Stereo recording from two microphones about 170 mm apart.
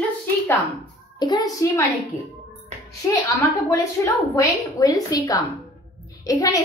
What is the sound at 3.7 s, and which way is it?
A woman's voice, 20° left (ahead or behind).